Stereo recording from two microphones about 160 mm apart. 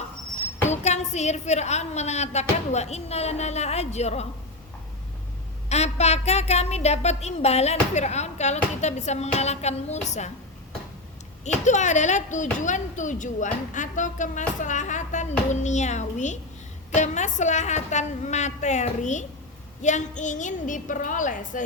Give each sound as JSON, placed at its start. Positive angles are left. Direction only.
{"t": 0.7, "sound": "a woman's voice", "side_deg": 45}
{"t": 5.6, "sound": "a woman's voice", "side_deg": 45}
{"t": 11.4, "sound": "a woman's voice", "side_deg": 50}